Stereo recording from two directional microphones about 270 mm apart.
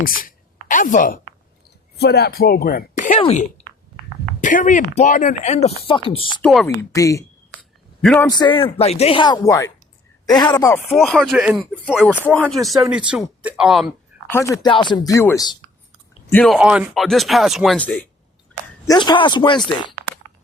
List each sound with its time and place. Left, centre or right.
0.0 s a woman's voice: left
6.4 s speech: centre
6.7 s a man's voice: centre
10.9 s speech: centre
14.3 s a man's voice: centre
18.9 s a man's voice: centre